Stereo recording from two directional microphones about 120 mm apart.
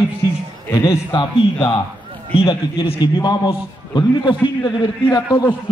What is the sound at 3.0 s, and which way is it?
A man's voice, 35° left (ahead or behind).